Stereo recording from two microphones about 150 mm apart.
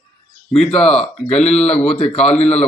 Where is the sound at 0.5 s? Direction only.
40° left (ahead or behind).